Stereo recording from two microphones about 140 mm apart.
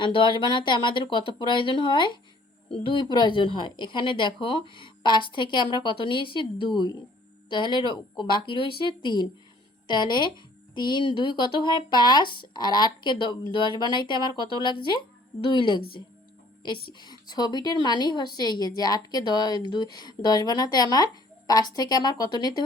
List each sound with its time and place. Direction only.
0.0 s a woman's voice: 35° left (ahead or behind)